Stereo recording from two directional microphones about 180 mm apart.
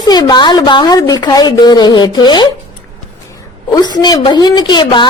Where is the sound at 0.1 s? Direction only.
25° left (ahead or behind).